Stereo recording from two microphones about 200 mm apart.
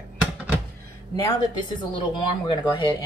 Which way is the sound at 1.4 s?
25° left (ahead or behind).